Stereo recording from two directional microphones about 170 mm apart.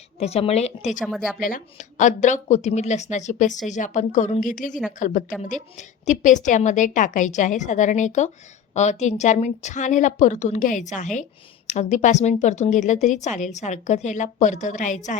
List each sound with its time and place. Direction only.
0.2 s speech: 35° left (ahead or behind)
1.0 s speech: centre (ahead or behind)
1.4 s a woman's voice: 55° left (ahead or behind)